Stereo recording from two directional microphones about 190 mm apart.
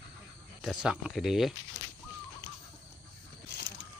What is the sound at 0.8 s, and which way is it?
Speech, 5° right (ahead or behind).